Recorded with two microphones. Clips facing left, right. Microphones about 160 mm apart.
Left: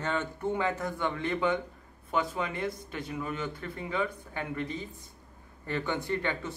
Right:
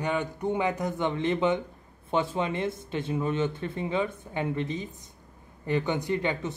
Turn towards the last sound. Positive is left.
turn(degrees=-20)  # may be behind; listen again after turning